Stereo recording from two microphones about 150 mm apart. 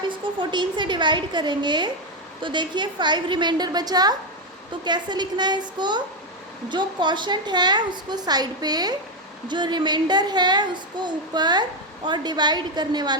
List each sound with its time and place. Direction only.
0.1 s a woman's voice: 30° right (ahead or behind)